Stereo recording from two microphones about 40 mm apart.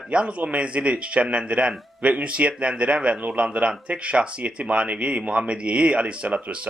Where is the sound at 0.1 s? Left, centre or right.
Right.